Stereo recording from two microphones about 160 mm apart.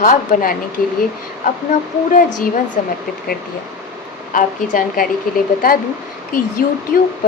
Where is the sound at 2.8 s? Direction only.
60° left (ahead or behind).